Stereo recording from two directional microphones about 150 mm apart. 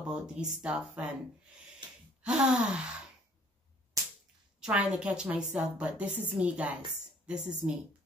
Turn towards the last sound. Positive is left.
turn(degrees=-5)  # may be behind; listen again after turning